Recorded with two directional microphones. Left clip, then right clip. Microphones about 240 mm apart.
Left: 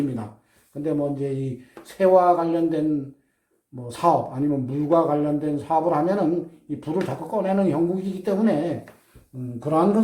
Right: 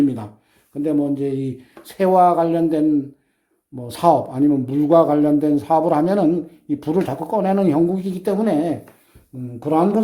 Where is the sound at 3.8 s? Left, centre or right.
Right.